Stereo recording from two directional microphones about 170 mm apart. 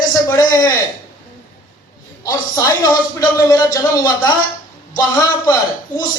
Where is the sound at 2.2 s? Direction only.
20° left (ahead or behind).